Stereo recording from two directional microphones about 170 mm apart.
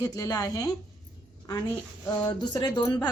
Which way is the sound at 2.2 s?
25° left (ahead or behind).